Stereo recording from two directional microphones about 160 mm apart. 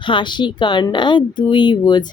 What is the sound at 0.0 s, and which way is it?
A woman's voice, 30° left (ahead or behind).